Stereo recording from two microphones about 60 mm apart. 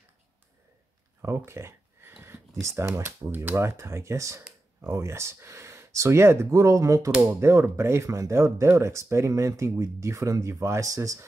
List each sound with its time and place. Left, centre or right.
1.2 s a sound: right
2.6 s speech: right
3.3 s speech: right
7.2 s speech: right
9.3 s speech: right